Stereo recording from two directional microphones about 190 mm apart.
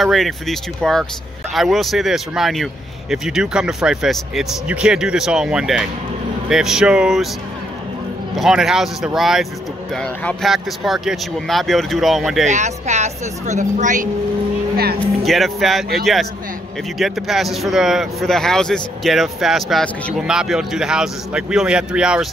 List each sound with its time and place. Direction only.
0.0 s a man's voice: centre (ahead or behind)
8.4 s a man's voice: centre (ahead or behind)
12.4 s speech: 40° right (ahead or behind)
15.0 s a man's voice: centre (ahead or behind)
17.0 s a man's voice: centre (ahead or behind)